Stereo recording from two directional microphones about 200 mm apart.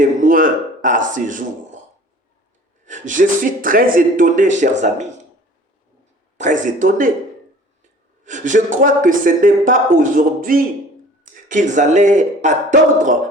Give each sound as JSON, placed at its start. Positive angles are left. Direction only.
{"t": 0.0, "sound": "a sound", "side_deg": -40}
{"t": 1.1, "sound": "speech", "side_deg": -40}
{"t": 2.8, "sound": "speech", "side_deg": -40}
{"t": 6.3, "sound": "speech", "side_deg": -40}
{"t": 8.2, "sound": "speech", "side_deg": -40}